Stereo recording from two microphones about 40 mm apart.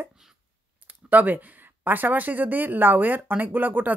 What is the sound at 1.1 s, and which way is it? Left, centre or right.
Speech, right.